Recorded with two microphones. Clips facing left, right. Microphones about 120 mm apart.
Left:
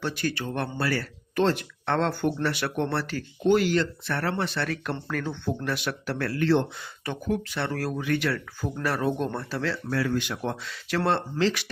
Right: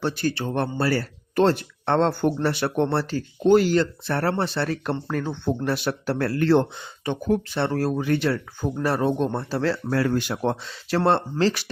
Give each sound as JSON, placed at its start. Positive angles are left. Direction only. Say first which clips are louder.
{"t": 0.0, "sound": "speech", "louder": "right 4 dB", "side_deg": -30}
{"t": 7.3, "sound": "speech", "louder": "right 5 dB", "side_deg": -30}